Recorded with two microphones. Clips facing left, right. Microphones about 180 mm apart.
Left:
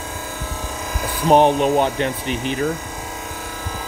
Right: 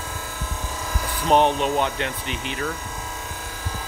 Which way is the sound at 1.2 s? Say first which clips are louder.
Left 5 dB; 45° left (ahead or behind).